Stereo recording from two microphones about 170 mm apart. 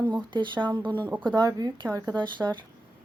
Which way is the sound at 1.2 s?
25° right (ahead or behind).